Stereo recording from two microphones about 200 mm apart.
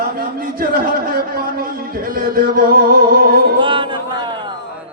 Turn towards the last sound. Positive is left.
turn(degrees=-25)  # may be behind; listen again after turning